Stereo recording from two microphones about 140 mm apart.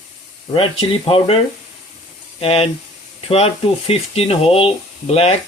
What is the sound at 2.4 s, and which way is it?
Speech, 45° left (ahead or behind).